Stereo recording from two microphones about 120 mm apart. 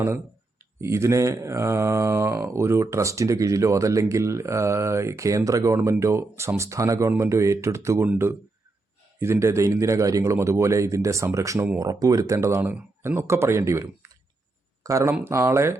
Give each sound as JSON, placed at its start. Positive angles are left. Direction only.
{"t": 0.8, "sound": "speech", "side_deg": -25}